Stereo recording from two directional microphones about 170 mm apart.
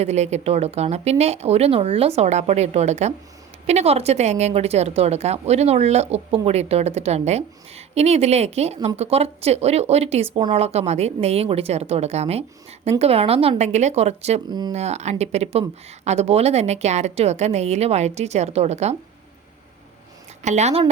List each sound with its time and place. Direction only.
0.0 s speech: 40° right (ahead or behind)
20.4 s speech: 40° right (ahead or behind)